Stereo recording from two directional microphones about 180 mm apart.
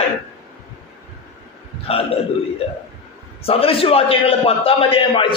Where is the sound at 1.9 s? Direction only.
30° left (ahead or behind).